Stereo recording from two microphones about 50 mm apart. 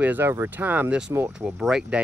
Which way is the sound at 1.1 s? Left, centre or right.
Right.